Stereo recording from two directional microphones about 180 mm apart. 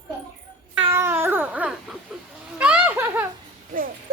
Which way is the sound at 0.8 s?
15° right (ahead or behind).